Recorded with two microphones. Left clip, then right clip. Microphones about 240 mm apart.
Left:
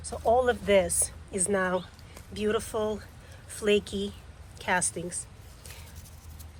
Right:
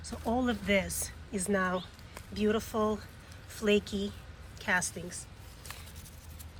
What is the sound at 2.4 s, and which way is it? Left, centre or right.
Speech, left.